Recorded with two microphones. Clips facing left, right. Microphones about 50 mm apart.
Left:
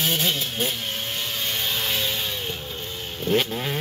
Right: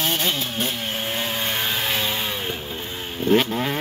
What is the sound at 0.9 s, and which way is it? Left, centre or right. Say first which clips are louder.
Vehicle: right 4 dB; right.